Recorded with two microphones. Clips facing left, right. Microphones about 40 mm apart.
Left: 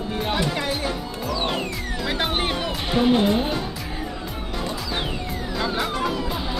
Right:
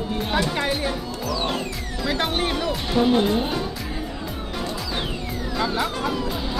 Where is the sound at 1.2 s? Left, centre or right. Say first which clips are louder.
Left 1 dB; centre.